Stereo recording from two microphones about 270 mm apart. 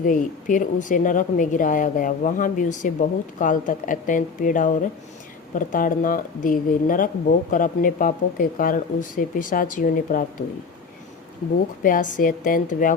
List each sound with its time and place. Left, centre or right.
0.0 s speech: left
11.8 s speech: left